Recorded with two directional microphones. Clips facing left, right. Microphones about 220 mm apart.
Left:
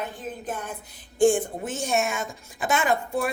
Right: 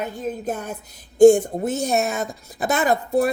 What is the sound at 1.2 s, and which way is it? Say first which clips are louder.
A woman's voice: right 9 dB; 40° right (ahead or behind).